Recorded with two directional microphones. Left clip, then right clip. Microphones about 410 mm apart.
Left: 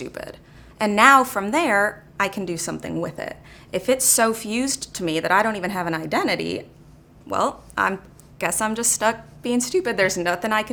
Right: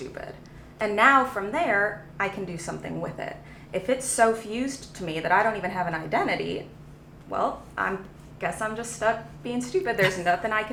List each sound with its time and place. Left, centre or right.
0.8 s a woman's voice: left